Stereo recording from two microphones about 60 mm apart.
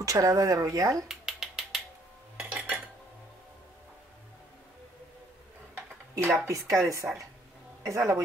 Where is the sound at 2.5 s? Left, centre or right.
Right.